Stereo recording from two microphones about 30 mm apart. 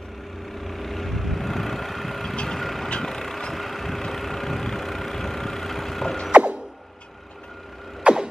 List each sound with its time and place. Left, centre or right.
0.5 s vehicle: centre
3.5 s vehicle: centre
6.3 s mechanisms: right
8.0 s mechanisms: right